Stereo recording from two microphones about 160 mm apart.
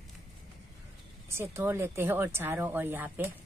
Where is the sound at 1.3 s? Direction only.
15° right (ahead or behind).